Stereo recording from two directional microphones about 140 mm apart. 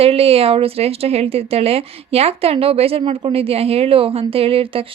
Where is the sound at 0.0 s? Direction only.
45° right (ahead or behind).